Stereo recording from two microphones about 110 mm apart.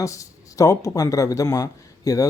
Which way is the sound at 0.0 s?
30° left (ahead or behind).